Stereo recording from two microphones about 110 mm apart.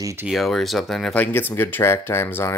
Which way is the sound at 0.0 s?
25° right (ahead or behind).